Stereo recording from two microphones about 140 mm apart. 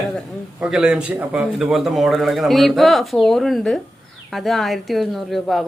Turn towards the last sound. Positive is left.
turn(degrees=0)  # may be behind; listen again after turning